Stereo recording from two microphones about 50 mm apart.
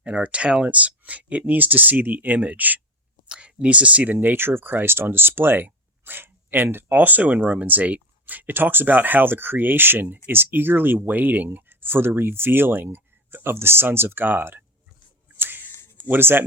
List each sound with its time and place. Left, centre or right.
0.0 s speech: right
3.2 s speech: right
15.4 s a sound: right
16.0 s speech: right